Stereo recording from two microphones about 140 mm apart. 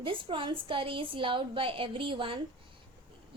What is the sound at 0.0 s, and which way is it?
A woman's voice, 35° right (ahead or behind).